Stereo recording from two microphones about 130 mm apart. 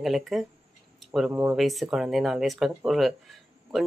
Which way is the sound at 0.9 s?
Centre (ahead or behind).